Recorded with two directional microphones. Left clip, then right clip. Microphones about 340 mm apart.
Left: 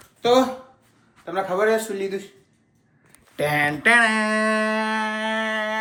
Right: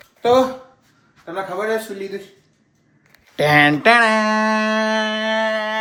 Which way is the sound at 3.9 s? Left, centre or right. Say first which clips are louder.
Right 4 dB; centre.